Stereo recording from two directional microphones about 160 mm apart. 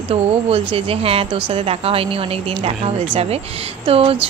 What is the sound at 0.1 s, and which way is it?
A woman's voice, 40° right (ahead or behind).